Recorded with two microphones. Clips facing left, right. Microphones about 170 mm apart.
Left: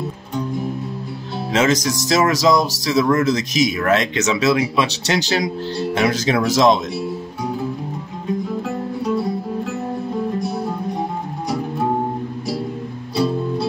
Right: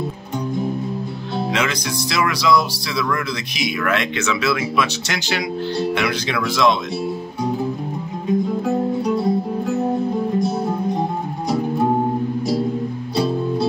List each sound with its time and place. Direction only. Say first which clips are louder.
1.5 s speech: left 9 dB; 40° left (ahead or behind)
9.0 s music: right 1 dB; 20° right (ahead or behind)
10.4 s music: right 3 dB; 20° right (ahead or behind)